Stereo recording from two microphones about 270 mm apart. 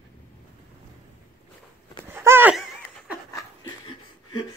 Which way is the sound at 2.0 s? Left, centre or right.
Centre.